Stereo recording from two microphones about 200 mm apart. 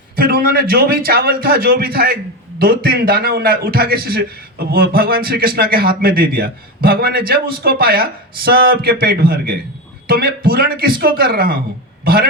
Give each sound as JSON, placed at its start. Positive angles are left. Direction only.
{"t": 0.2, "sound": "a man's voice", "side_deg": -50}